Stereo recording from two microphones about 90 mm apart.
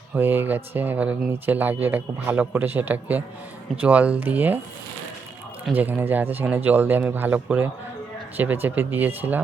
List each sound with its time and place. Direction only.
0.1 s speech: 25° right (ahead or behind)
5.7 s speech: 20° right (ahead or behind)